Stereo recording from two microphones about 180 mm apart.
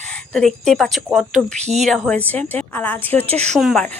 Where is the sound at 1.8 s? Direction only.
Centre (ahead or behind).